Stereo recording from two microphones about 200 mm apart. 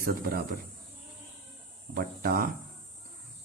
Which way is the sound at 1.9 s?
50° right (ahead or behind).